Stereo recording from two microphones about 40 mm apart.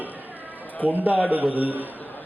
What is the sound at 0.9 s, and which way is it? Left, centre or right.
Speech, right.